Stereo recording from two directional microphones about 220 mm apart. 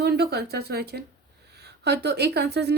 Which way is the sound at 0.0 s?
45° right (ahead or behind).